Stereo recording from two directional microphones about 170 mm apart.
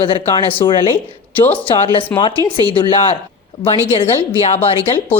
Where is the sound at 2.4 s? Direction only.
20° right (ahead or behind).